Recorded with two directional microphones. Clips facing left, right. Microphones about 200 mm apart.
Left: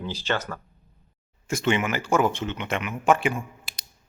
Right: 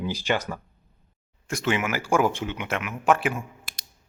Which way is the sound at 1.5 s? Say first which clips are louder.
Left 2 dB; centre (ahead or behind).